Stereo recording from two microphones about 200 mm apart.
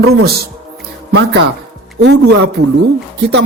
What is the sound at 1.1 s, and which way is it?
Speech, 65° right (ahead or behind).